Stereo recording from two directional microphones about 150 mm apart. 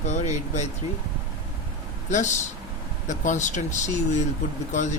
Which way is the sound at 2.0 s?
55° left (ahead or behind).